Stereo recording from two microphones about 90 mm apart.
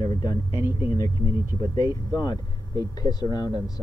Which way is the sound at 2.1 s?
45° left (ahead or behind).